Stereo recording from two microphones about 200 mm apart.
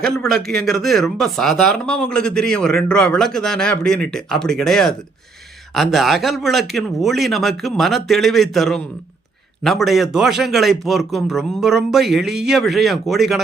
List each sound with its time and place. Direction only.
0.0 s speech: 5° left (ahead or behind)